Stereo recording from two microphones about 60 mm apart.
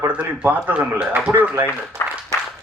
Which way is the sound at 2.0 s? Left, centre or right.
Left.